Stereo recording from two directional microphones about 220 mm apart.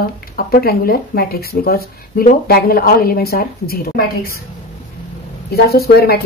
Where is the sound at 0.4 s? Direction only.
45° left (ahead or behind).